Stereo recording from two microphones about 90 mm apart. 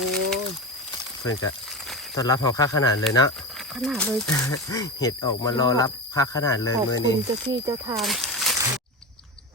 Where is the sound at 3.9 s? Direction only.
10° left (ahead or behind).